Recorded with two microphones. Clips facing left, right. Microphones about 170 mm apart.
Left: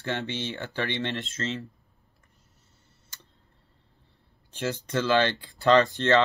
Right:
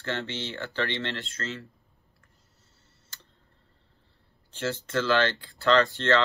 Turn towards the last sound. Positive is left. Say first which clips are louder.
# left 2 dB
turn(degrees=20)  # may be behind; listen again after turning